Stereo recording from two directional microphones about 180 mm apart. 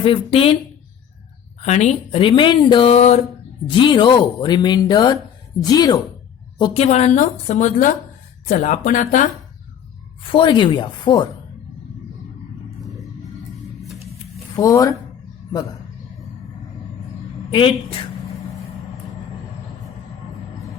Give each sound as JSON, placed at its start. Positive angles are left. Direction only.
{"t": 0.0, "sound": "speech", "side_deg": 30}
{"t": 1.6, "sound": "speech", "side_deg": 40}
{"t": 6.6, "sound": "speech", "side_deg": 35}
{"t": 10.2, "sound": "speech", "side_deg": 25}
{"t": 14.5, "sound": "speech", "side_deg": 20}